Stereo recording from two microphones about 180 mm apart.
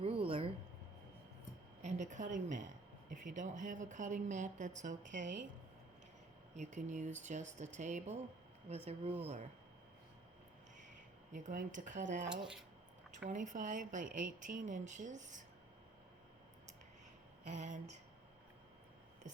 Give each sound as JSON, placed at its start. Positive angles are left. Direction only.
{"t": 0.0, "sound": "a sound", "side_deg": -30}
{"t": 1.8, "sound": "a woman's voice", "side_deg": -40}
{"t": 6.6, "sound": "speech", "side_deg": -40}
{"t": 11.3, "sound": "speech", "side_deg": -45}
{"t": 12.2, "sound": "speech", "side_deg": -5}
{"t": 13.2, "sound": "speech", "side_deg": -45}
{"t": 17.5, "sound": "speech", "side_deg": -40}